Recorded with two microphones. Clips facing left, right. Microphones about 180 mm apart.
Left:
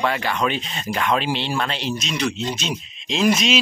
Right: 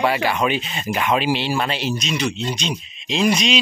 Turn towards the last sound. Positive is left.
turn(degrees=0)  # may be behind; listen again after turning